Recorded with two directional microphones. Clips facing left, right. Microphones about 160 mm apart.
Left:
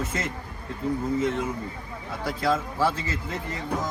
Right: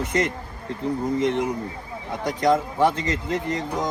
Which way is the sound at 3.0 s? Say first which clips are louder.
Right 7 dB; 80° right.